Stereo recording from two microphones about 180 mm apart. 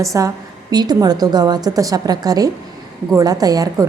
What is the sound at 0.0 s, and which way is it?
A woman's voice, 15° right (ahead or behind).